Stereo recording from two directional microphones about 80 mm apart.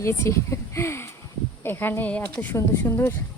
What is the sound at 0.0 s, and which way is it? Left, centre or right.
A woman's voice, left.